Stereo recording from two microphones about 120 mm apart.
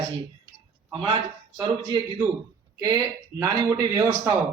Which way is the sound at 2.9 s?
25° right (ahead or behind).